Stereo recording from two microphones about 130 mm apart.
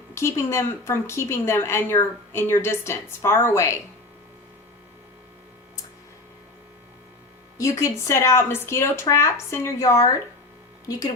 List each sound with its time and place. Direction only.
0.1 s a woman's voice: 20° left (ahead or behind)
7.6 s a woman's voice: 20° left (ahead or behind)